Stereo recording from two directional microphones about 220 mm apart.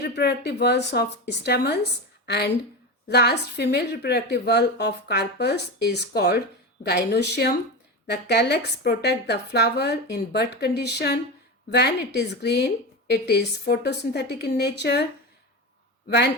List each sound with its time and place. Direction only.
0.0 s a woman's voice: 50° left (ahead or behind)
16.0 s a woman's voice: 50° left (ahead or behind)